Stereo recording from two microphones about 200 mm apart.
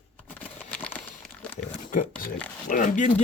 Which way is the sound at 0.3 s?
5° left (ahead or behind).